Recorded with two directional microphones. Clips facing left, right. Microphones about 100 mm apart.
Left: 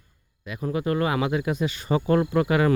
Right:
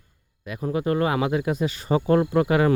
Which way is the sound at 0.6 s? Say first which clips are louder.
Right 2 dB; 35° right (ahead or behind).